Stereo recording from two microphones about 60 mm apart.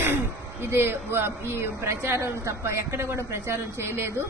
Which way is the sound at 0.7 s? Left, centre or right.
Right.